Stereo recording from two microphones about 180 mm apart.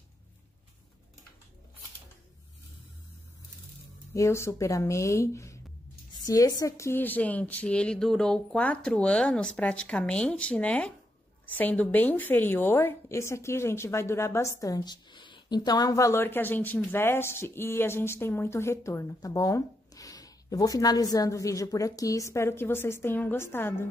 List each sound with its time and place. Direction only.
4.1 s a woman's voice: 15° left (ahead or behind)